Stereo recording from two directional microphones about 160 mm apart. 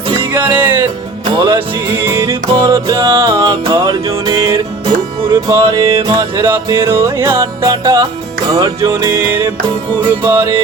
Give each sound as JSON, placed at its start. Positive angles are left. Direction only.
{"t": 0.3, "sound": "music", "side_deg": -10}